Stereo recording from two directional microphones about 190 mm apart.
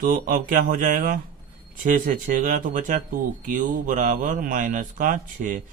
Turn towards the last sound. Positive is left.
turn(degrees=-45)  # may be behind; listen again after turning